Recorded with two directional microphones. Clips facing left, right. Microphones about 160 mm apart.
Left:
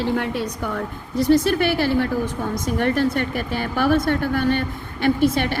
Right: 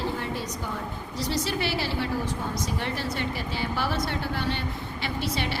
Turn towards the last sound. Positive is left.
turn(degrees=50)  # may be behind; listen again after turning